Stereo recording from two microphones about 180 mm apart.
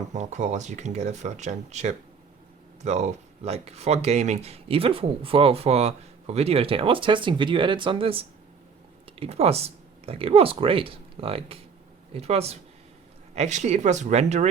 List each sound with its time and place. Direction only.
0.1 s speech: 40° right (ahead or behind)